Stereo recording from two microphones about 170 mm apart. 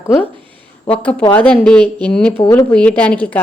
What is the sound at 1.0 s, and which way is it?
Speech, 5° left (ahead or behind).